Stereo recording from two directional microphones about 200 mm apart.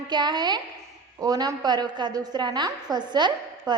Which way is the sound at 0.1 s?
20° right (ahead or behind).